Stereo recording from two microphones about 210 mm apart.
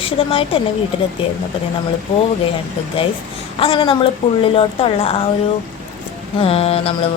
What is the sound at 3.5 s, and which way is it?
A woman's voice, 25° left (ahead or behind).